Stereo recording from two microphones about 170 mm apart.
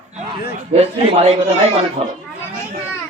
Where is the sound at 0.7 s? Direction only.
40° right (ahead or behind).